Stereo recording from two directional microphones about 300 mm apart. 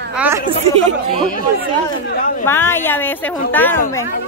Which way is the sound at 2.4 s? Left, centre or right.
Centre.